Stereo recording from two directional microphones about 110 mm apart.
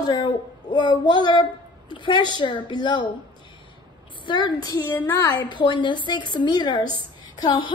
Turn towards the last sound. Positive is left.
turn(degrees=45)  # may be behind; listen again after turning